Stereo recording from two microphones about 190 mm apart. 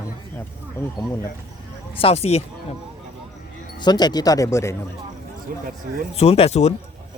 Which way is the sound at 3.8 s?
20° left (ahead or behind).